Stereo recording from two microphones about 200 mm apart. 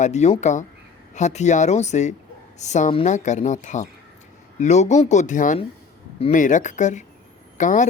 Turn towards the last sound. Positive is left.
turn(degrees=40)  # may be behind; listen again after turning